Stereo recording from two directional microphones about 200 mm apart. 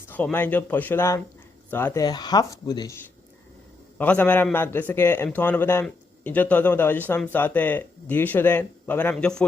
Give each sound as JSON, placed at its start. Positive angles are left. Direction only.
{"t": 0.1, "sound": "a man's voice", "side_deg": 10}